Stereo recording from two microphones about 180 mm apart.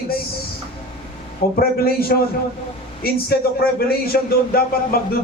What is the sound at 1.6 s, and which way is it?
A man's voice, 60° left (ahead or behind).